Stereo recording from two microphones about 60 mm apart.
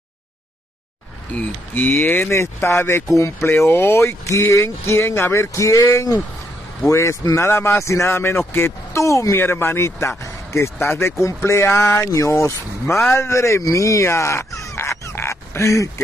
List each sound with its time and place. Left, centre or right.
1.9 s speech: left
2.3 s speech: left
3.4 s speech: left
8.1 s speech: left
9.4 s speech: left
14.8 s a sound: left